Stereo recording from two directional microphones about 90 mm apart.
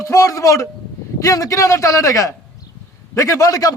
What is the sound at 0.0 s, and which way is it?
A man's voice, 35° left (ahead or behind).